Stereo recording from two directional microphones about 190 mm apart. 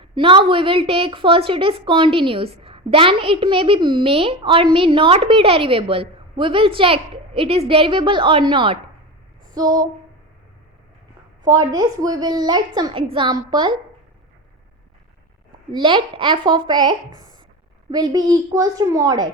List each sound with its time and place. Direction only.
0.0 s a woman's voice: 25° right (ahead or behind)
11.4 s a woman's voice: 20° right (ahead or behind)
15.7 s a woman's voice: 25° right (ahead or behind)